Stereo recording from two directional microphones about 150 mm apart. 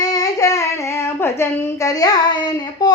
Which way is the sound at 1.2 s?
20° left (ahead or behind).